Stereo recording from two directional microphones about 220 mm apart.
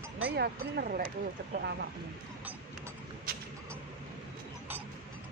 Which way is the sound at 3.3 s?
45° right (ahead or behind).